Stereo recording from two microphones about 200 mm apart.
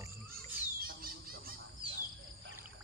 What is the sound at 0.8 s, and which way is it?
Bird, 50° right (ahead or behind).